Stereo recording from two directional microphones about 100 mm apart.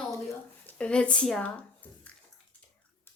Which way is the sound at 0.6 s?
10° left (ahead or behind).